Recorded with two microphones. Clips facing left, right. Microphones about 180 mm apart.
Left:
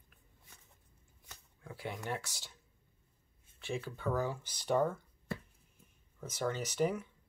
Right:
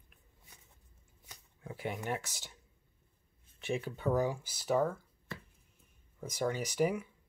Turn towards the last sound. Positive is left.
turn(degrees=-10)  # may be behind; listen again after turning